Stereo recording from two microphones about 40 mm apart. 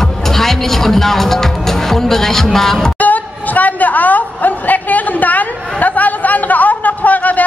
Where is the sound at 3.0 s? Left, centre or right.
Left.